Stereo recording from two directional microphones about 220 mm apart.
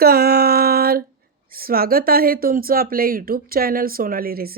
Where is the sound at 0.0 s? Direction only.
45° right (ahead or behind).